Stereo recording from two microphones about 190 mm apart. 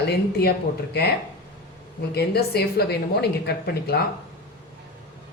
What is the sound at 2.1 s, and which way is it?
A woman's voice, 55° left (ahead or behind).